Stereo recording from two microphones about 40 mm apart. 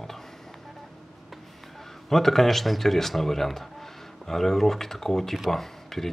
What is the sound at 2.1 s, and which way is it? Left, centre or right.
Speech, centre.